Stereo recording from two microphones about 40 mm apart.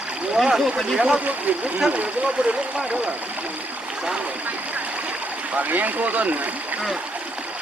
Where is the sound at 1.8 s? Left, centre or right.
Right.